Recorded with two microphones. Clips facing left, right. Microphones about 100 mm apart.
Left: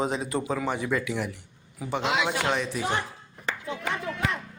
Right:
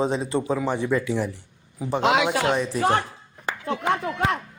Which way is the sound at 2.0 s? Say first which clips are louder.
Right 6 dB; 60° right (ahead or behind).